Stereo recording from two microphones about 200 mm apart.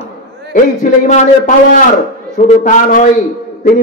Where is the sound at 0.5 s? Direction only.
40° left (ahead or behind).